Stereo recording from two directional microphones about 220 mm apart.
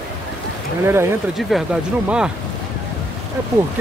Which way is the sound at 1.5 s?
Centre (ahead or behind).